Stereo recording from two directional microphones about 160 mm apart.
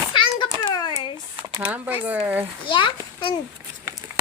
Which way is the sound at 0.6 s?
25° left (ahead or behind).